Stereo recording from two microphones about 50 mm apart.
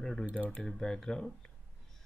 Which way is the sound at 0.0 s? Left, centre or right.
Centre.